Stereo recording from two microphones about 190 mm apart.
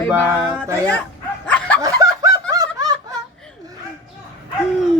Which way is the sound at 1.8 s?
15° right (ahead or behind).